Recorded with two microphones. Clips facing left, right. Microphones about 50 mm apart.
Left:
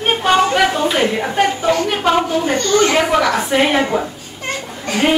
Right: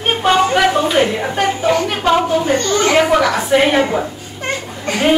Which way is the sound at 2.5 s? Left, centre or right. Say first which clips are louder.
Left 1 dB; right.